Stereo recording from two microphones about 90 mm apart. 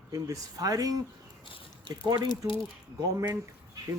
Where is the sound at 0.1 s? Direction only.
40° right (ahead or behind).